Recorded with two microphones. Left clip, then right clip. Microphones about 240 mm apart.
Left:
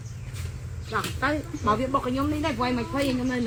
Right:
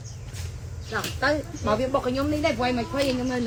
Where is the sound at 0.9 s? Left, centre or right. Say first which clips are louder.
Right 2 dB; centre.